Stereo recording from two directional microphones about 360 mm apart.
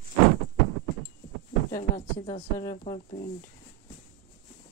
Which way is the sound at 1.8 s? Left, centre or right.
Centre.